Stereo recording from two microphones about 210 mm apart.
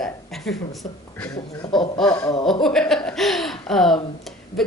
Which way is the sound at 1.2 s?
15° left (ahead or behind).